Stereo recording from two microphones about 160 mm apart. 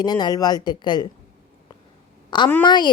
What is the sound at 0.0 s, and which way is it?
A woman's voice, 25° left (ahead or behind).